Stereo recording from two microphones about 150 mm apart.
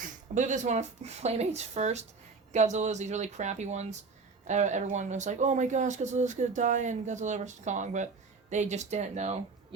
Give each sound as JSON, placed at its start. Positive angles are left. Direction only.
{"t": 0.3, "sound": "speech", "side_deg": -55}